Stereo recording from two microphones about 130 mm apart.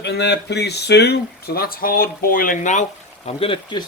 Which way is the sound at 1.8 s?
90° left.